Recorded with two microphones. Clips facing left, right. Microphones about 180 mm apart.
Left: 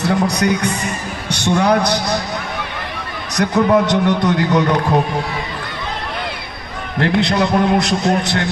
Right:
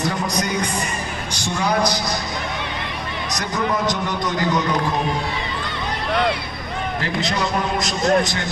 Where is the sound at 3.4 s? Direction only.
65° left (ahead or behind).